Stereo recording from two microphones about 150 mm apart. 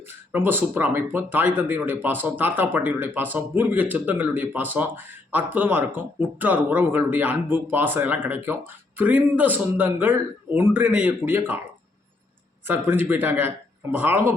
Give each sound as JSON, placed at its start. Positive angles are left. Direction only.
{"t": 0.3, "sound": "speech", "side_deg": -15}
{"t": 12.6, "sound": "speech", "side_deg": -15}